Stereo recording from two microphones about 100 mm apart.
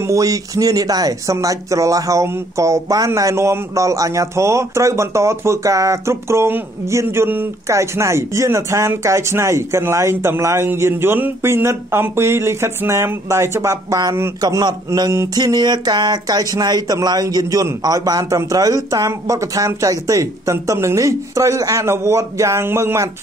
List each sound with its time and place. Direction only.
0.0 s speech: 35° right (ahead or behind)